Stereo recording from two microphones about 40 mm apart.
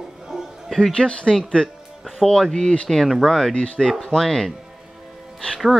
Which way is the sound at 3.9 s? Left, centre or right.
Centre.